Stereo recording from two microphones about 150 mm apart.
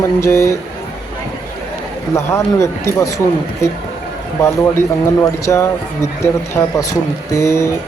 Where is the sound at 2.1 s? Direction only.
20° left (ahead or behind).